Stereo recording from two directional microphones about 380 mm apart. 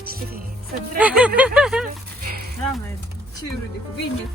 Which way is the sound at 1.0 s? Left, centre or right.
Centre.